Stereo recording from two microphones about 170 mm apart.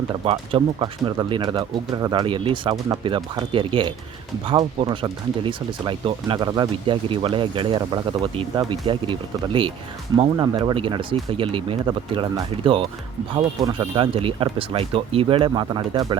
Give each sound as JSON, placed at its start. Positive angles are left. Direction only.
{"t": 0.1, "sound": "speech", "side_deg": -30}